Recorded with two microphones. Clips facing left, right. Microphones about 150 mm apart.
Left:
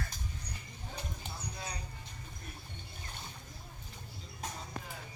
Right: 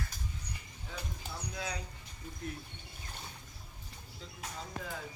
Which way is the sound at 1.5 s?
90° right.